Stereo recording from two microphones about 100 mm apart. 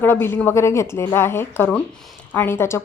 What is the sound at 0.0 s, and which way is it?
A woman's voice, 25° left (ahead or behind).